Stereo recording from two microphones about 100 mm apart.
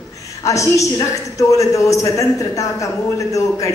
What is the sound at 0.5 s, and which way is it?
A man's voice, 30° left (ahead or behind).